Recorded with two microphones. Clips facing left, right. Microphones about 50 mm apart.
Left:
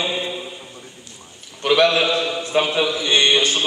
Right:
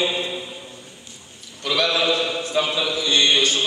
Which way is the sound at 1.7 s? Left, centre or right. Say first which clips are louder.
Left 5 dB; left.